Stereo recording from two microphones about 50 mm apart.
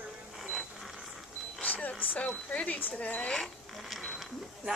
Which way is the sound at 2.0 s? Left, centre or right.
Left.